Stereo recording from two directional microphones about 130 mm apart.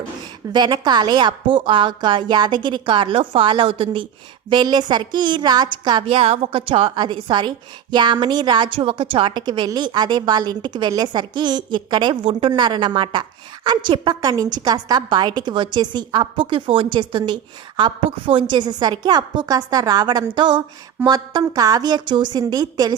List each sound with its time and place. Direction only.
0.5 s a woman's voice: 35° right (ahead or behind)